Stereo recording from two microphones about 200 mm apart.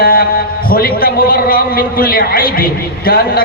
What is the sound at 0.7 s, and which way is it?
A man's voice, 45° left (ahead or behind).